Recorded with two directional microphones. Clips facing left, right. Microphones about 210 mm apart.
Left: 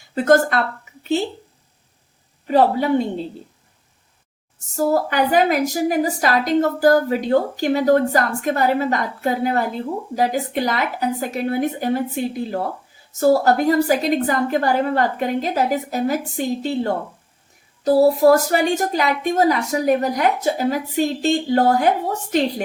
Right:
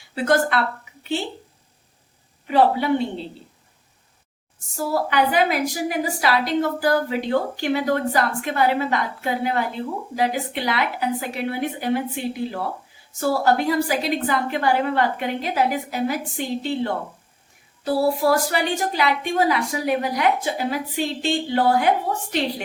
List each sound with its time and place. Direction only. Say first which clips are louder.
0.1 s a woman's voice: left 4 dB; 45° left (ahead or behind)
2.5 s a woman's voice: left 2 dB; 40° left (ahead or behind)
4.8 s a woman's voice: left 3 dB; 45° left (ahead or behind)